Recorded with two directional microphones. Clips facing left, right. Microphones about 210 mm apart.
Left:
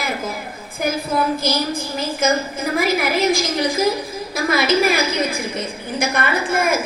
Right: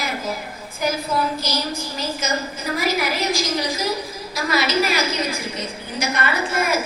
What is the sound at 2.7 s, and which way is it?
A woman's voice, 50° left (ahead or behind).